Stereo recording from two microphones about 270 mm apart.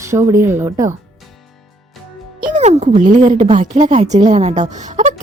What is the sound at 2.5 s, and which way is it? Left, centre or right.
Speech, right.